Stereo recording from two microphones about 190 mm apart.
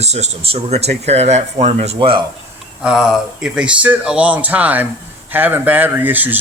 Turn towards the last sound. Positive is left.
turn(degrees=-10)  # may be behind; listen again after turning